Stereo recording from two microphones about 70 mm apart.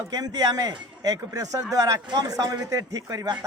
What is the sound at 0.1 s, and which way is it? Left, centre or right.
Speech, right.